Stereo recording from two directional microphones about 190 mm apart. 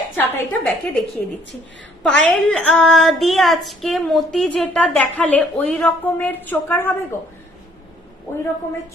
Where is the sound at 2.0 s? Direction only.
5° left (ahead or behind).